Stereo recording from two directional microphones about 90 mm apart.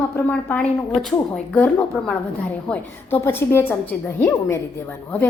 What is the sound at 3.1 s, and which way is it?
A woman's voice, 25° left (ahead or behind).